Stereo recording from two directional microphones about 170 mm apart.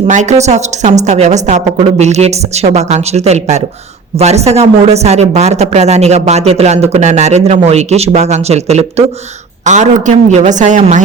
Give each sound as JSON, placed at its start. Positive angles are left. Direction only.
{"t": 0.1, "sound": "a woman's voice", "side_deg": -45}